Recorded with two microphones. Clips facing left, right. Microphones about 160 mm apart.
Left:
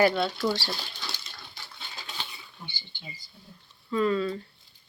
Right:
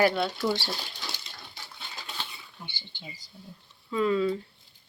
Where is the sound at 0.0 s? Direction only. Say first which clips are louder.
Left 1 dB; 5° right (ahead or behind).